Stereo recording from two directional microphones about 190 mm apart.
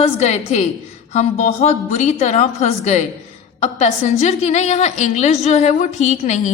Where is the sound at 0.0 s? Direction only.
35° left (ahead or behind).